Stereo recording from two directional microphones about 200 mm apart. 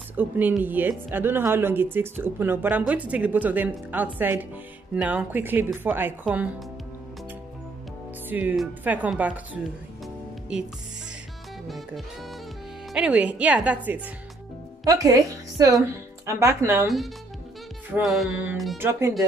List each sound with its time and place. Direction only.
0.2 s speech: 10° right (ahead or behind)
8.3 s speech: 10° right (ahead or behind)
11.6 s music: centre (ahead or behind)
12.9 s a woman's voice: 5° right (ahead or behind)
17.9 s music: centre (ahead or behind)
18.8 s speech: 15° right (ahead or behind)